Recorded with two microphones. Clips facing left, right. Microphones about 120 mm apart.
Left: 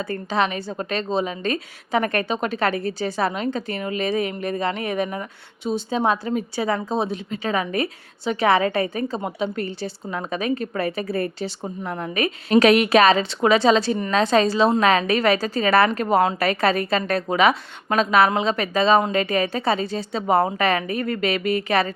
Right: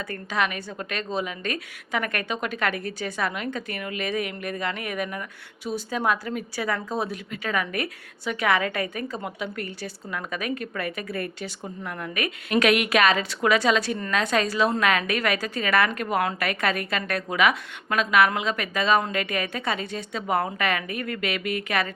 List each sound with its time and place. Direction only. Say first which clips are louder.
0.0 s a woman's voice: left 5 dB; 30° left (ahead or behind)